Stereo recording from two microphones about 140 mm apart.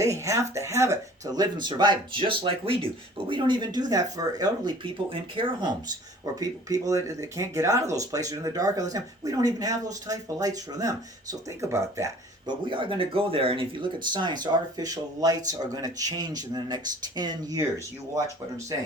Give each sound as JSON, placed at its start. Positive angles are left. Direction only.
{"t": 0.0, "sound": "speech", "side_deg": -20}
{"t": 12.5, "sound": "speech", "side_deg": -35}